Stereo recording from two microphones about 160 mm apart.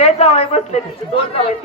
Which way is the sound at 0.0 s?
40° left (ahead or behind).